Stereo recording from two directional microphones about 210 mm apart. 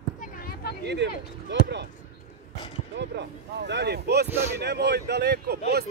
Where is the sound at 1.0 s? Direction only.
55° right (ahead or behind).